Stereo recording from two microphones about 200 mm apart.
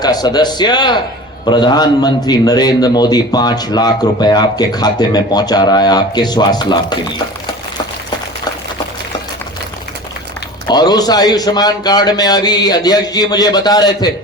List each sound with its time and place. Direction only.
0.0 s a man's voice: 20° left (ahead or behind)
10.7 s a man's voice: 20° left (ahead or behind)